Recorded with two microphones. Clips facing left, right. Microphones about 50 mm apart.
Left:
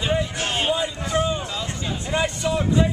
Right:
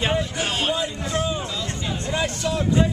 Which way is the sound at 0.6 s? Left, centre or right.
Centre.